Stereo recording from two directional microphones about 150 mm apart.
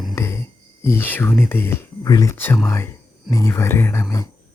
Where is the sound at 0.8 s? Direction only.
15° left (ahead or behind).